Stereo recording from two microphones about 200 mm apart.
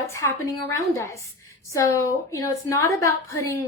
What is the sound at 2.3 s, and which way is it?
A woman's voice, 15° left (ahead or behind).